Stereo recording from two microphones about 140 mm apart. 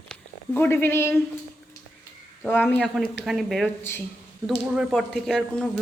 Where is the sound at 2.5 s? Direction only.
15° left (ahead or behind).